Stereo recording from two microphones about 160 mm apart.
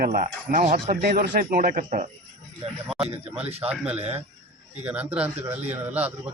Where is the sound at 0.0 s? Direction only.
60° right (ahead or behind).